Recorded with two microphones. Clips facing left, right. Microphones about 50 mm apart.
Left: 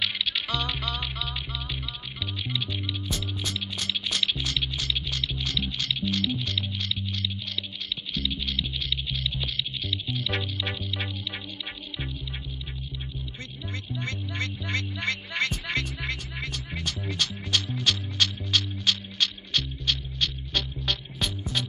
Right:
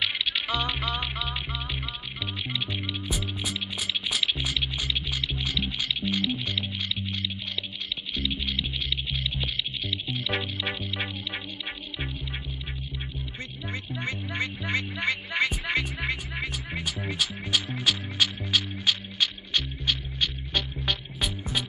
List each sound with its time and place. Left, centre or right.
0.0 s music: centre
13.7 s music: centre